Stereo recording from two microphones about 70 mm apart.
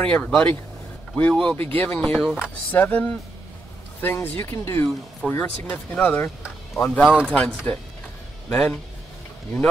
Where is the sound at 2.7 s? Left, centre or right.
Left.